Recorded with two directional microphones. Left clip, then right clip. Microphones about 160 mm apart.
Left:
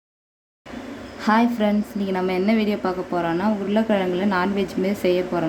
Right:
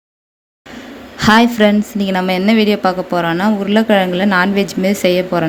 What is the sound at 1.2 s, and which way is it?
A woman's voice, 30° right (ahead or behind).